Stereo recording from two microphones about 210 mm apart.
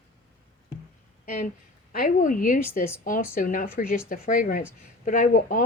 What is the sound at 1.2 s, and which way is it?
A woman's voice, 40° left (ahead or behind).